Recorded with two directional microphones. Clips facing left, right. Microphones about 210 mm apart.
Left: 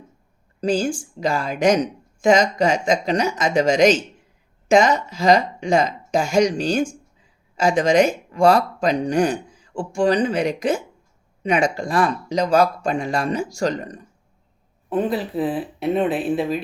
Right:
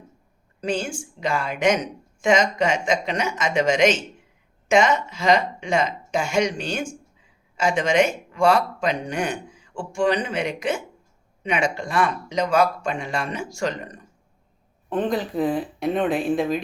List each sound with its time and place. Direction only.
0.6 s speech: 35° left (ahead or behind)
14.8 s speech: 5° left (ahead or behind)